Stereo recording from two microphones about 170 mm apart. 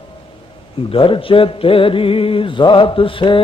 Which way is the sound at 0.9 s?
30° left (ahead or behind).